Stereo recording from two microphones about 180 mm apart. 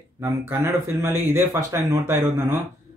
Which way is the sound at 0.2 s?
15° right (ahead or behind).